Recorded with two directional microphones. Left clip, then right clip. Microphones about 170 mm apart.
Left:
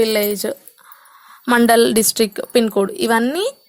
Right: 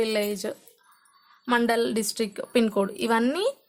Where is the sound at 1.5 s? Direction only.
50° left (ahead or behind).